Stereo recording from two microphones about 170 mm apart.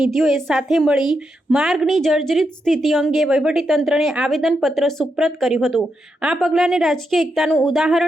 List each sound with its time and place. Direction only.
0.0 s a woman's voice: centre (ahead or behind)